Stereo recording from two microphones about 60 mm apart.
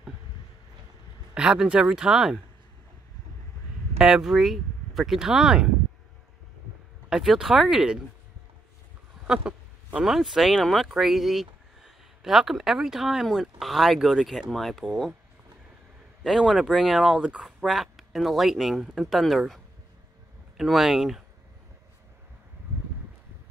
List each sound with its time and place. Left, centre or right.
1.3 s speech: centre
4.0 s speech: centre
7.1 s speech: centre
9.3 s a sound: centre
10.0 s speech: centre
16.3 s speech: centre